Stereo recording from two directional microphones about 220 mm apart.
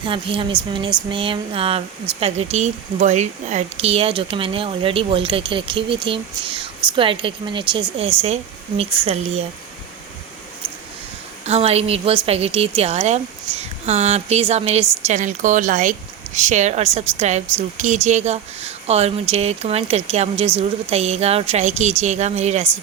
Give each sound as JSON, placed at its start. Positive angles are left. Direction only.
{"t": 0.0, "sound": "speech", "side_deg": -25}
{"t": 11.4, "sound": "speech", "side_deg": -30}